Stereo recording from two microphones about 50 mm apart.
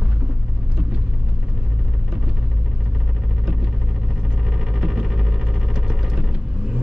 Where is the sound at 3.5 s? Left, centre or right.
Centre.